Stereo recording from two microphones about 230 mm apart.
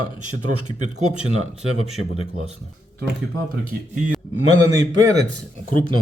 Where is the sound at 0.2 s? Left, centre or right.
Right.